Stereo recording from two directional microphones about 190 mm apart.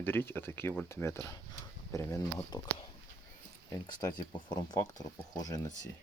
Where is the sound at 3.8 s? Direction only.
20° left (ahead or behind).